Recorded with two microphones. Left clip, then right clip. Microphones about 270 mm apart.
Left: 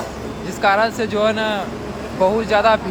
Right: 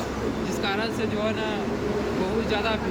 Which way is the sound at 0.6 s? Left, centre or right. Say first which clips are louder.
Left 13 dB; centre.